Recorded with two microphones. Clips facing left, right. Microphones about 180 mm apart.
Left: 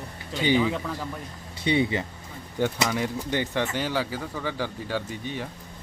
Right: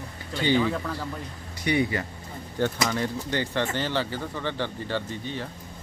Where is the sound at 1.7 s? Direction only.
25° left (ahead or behind).